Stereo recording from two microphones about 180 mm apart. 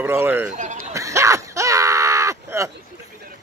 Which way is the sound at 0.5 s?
45° right (ahead or behind).